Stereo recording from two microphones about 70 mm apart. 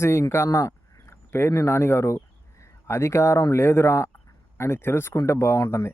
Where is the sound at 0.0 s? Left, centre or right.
Left.